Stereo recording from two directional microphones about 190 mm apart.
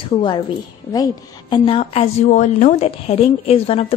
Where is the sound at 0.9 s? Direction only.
25° left (ahead or behind).